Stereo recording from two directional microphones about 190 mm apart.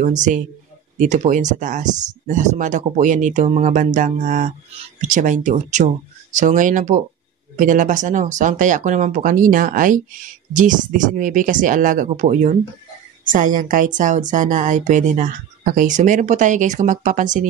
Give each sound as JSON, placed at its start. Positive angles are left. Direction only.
{"t": 0.0, "sound": "a woman's voice", "side_deg": -40}